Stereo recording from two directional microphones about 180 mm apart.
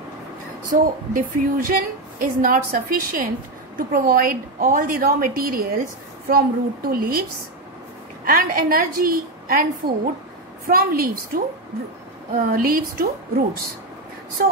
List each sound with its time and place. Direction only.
0.7 s a woman's voice: 50° right (ahead or behind)
8.3 s a woman's voice: 50° right (ahead or behind)